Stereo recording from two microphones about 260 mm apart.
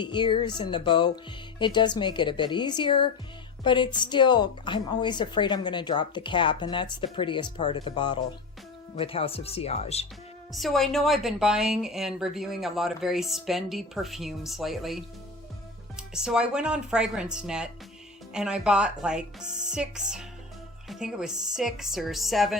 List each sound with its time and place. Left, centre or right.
0.0 s a woman's voice: centre
10.5 s speech: centre